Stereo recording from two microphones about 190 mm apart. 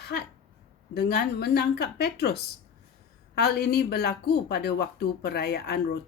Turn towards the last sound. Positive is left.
turn(degrees=60)  # may be behind; listen again after turning